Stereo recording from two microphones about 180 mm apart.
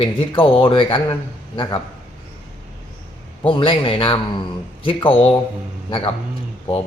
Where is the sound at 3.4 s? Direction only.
30° left (ahead or behind).